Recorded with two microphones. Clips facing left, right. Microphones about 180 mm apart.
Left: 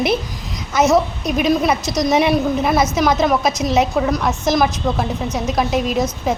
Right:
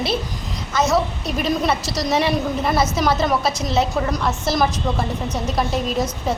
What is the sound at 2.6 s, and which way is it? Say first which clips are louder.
A woman's voice: left 3 dB; 5° left (ahead or behind).